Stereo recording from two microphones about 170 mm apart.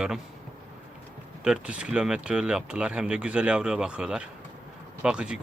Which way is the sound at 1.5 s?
5° right (ahead or behind).